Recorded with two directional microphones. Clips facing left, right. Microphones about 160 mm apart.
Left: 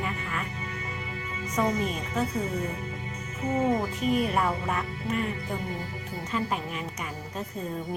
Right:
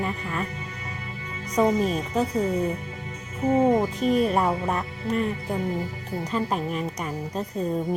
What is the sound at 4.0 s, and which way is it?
A woman's voice, 35° right (ahead or behind).